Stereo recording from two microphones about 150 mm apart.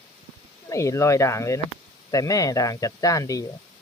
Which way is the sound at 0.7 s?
20° left (ahead or behind).